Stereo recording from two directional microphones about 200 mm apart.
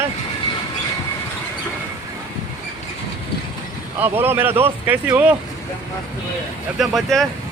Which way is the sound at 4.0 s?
10° right (ahead or behind).